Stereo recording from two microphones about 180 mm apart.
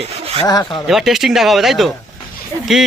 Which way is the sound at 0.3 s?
20° left (ahead or behind).